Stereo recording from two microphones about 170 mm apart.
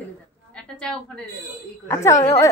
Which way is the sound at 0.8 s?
5° left (ahead or behind).